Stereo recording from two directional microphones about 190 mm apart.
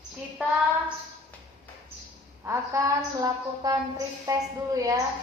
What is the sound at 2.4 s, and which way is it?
A woman's voice, 15° right (ahead or behind).